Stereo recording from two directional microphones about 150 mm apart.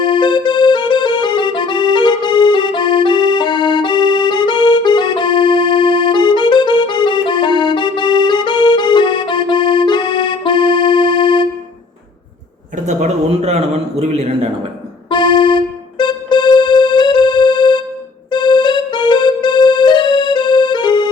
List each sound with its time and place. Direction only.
0.0 s music: 30° left (ahead or behind)
12.7 s a sound: 50° right (ahead or behind)
15.1 s keyboard: 30° left (ahead or behind)
18.3 s music: 30° left (ahead or behind)